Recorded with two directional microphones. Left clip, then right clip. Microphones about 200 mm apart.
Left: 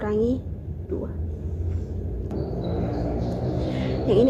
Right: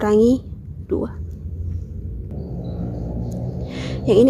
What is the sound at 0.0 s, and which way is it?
Speech, 35° right (ahead or behind).